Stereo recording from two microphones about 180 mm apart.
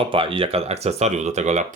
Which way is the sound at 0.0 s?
30° right (ahead or behind).